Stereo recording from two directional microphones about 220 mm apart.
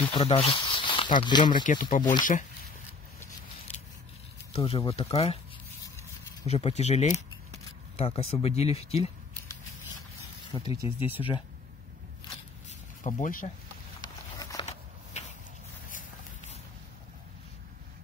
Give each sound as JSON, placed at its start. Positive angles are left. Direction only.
{"t": 0.1, "sound": "speech", "side_deg": 25}
{"t": 1.6, "sound": "speech", "side_deg": 35}
{"t": 4.5, "sound": "speech", "side_deg": 25}
{"t": 6.4, "sound": "speech", "side_deg": 30}
{"t": 10.7, "sound": "speech", "side_deg": 25}
{"t": 13.0, "sound": "speech", "side_deg": 35}
{"t": 14.0, "sound": "a sound", "side_deg": 15}